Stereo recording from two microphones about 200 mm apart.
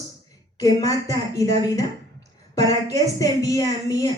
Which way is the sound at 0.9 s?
15° left (ahead or behind).